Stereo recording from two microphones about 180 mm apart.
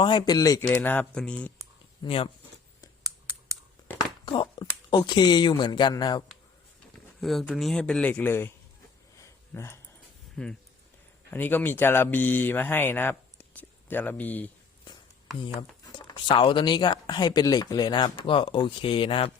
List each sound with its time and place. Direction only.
0.0 s speech: 25° left (ahead or behind); by 1.5 s 5° left (ahead or behind)
2.0 s speech: 30° left (ahead or behind)
4.3 s speech: 25° left (ahead or behind)
7.2 s a man's voice: centre (ahead or behind)
9.1 s a sound: 15° left (ahead or behind)
10.3 s speech: 5° left (ahead or behind)
15.4 s speech: 25° left (ahead or behind)